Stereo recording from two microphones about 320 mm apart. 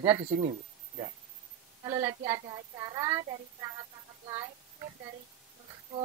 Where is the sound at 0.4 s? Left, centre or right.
Centre.